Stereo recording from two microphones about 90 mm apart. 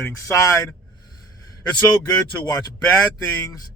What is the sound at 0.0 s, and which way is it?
Speech, 35° left (ahead or behind).